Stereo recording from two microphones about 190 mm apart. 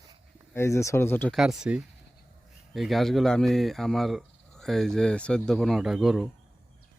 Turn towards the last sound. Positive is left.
turn(degrees=0)  # may be behind; listen again after turning